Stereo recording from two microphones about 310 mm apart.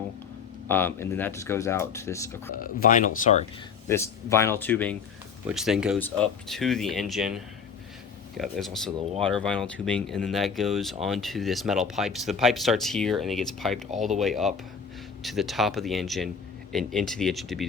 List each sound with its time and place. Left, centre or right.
0.7 s speech: centre
2.6 s speech: left
3.8 s speech: centre